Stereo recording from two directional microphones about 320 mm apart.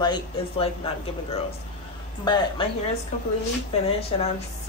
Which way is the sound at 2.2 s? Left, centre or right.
Centre.